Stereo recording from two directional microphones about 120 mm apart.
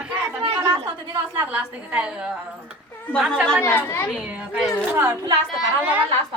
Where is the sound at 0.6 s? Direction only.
30° right (ahead or behind).